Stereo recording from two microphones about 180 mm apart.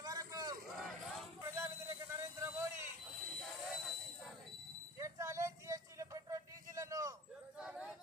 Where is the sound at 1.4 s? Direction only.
15° right (ahead or behind).